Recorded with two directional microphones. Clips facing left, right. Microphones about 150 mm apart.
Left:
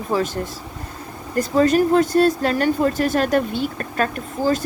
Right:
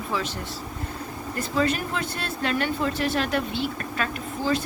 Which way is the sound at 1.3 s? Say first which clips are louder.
Left 9 dB; 45° left (ahead or behind).